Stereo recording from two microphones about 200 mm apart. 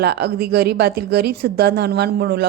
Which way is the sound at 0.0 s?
55° right (ahead or behind).